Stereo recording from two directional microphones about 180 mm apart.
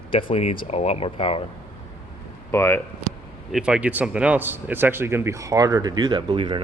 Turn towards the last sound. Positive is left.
turn(degrees=-25)  # may be behind; listen again after turning